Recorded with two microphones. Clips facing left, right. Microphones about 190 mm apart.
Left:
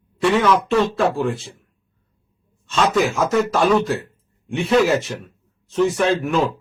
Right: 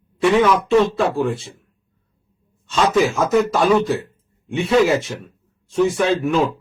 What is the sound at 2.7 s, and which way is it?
Speech, 5° right (ahead or behind).